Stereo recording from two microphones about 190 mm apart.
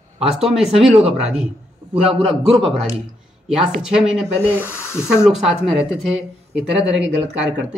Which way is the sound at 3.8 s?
5° right (ahead or behind).